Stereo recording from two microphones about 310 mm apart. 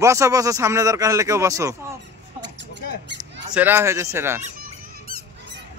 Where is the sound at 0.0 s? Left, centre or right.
Centre.